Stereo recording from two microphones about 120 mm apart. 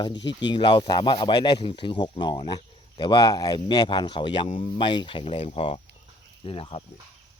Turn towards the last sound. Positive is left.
turn(degrees=50)  # may be behind; listen again after turning